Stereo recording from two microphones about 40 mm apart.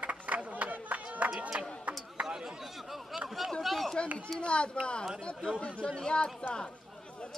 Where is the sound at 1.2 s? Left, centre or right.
Right.